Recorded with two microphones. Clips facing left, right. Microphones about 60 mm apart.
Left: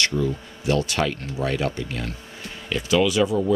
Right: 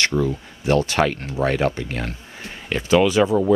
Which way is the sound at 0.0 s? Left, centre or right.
Right.